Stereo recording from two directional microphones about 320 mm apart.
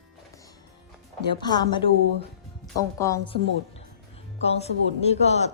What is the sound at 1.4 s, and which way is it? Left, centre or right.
A woman's voice, centre.